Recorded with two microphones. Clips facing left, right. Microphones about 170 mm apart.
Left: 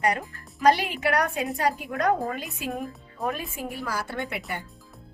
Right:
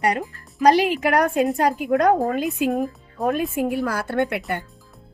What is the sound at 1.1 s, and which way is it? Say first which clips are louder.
A woman's voice: right 7 dB; 50° right (ahead or behind).